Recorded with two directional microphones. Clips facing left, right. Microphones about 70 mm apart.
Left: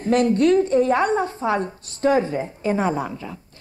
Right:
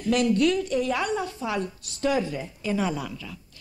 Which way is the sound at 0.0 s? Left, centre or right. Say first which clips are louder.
Left 4 dB; left.